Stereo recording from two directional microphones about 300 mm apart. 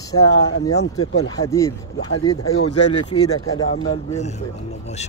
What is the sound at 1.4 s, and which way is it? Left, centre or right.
Speech, centre.